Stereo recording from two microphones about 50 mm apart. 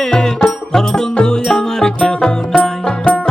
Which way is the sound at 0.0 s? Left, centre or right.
Centre.